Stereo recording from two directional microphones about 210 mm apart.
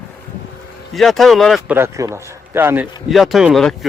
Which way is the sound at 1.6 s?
10° right (ahead or behind).